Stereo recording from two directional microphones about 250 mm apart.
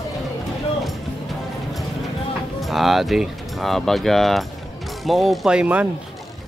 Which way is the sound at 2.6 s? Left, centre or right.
Centre.